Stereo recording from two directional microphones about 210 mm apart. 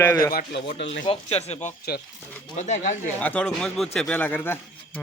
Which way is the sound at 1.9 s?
50° left (ahead or behind).